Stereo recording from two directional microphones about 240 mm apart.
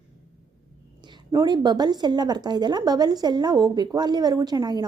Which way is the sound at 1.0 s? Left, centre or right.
Centre.